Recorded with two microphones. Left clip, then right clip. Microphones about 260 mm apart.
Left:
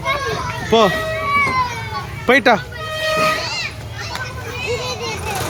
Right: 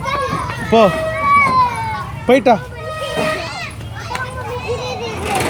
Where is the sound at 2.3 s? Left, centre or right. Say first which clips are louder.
Right 1 dB; centre.